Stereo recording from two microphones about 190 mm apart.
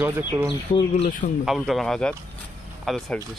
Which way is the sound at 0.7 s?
40° left (ahead or behind).